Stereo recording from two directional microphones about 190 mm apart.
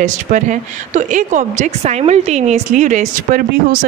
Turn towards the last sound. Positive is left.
turn(degrees=-50)  # may be behind; listen again after turning